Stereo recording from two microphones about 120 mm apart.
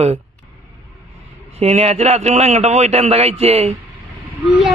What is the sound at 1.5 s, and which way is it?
A man's voice, 65° right (ahead or behind).